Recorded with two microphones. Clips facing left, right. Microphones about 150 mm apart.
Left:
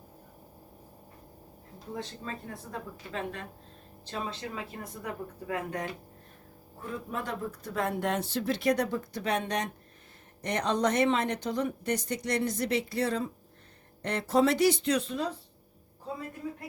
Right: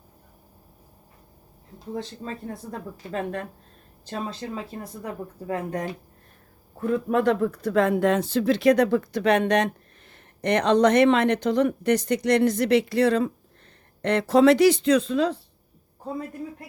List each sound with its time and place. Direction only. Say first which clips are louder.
1.9 s speech: right 5 dB; 35° right (ahead or behind)
3.1 s speech: right 8 dB; 45° right (ahead or behind)
6.8 s a woman's voice: right 14 dB; 75° right (ahead or behind)
14.0 s speech: right 8 dB; 90° right